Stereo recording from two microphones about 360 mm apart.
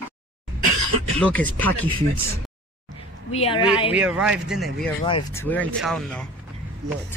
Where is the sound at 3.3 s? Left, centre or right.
Centre.